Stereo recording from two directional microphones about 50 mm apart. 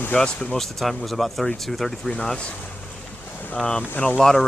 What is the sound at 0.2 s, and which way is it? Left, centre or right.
Speech, centre.